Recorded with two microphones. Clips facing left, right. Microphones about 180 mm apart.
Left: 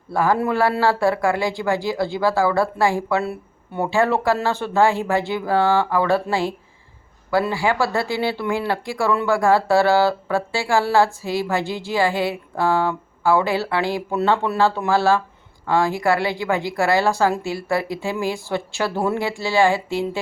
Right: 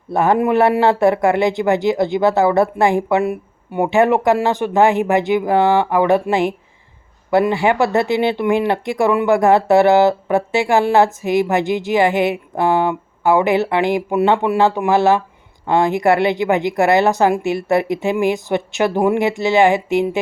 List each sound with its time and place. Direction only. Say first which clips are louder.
0.1 s speech: right 5 dB; 20° right (ahead or behind)